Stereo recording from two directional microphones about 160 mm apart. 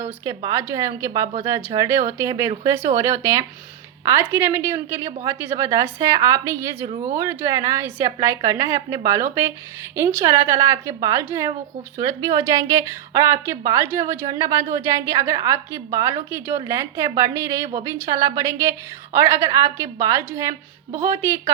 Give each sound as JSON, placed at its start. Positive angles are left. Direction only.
{"t": 0.0, "sound": "a woman's voice", "side_deg": -20}